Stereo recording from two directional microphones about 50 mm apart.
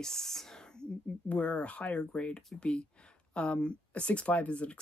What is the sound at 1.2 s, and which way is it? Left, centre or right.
Speech, left.